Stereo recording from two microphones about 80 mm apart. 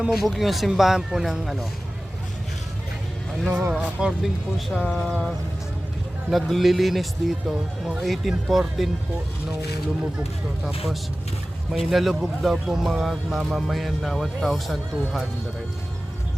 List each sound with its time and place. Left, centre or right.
0.0 s speech: centre
3.5 s speech: right
4.0 s speech: centre
4.7 s speech: centre
6.3 s speech: centre
11.7 s speech: centre